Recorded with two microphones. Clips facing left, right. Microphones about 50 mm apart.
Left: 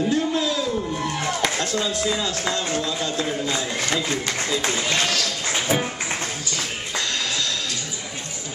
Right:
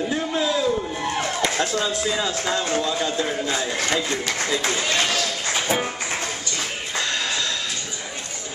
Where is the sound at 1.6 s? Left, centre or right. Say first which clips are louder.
Right 1 dB; centre.